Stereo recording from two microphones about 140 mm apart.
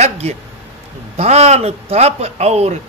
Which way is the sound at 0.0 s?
50° right (ahead or behind).